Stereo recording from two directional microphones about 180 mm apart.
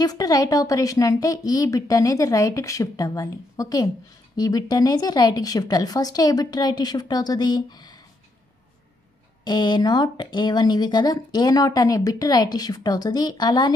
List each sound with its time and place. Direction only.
0.0 s speech: 20° left (ahead or behind)
9.4 s speech: 25° left (ahead or behind)